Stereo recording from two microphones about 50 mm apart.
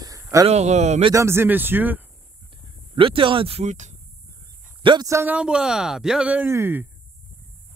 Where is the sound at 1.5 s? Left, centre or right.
Right.